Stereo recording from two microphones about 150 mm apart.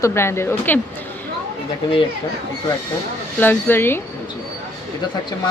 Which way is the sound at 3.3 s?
15° left (ahead or behind).